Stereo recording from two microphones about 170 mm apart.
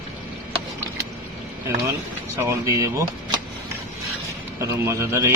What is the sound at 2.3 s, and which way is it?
Speech, 15° right (ahead or behind).